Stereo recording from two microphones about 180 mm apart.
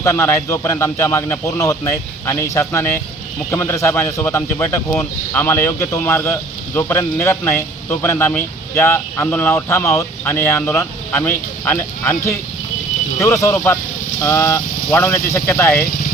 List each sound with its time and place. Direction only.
0.0 s speech: 15° left (ahead or behind)